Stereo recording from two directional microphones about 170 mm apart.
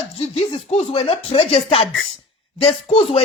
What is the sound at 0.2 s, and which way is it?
Speech, 40° left (ahead or behind).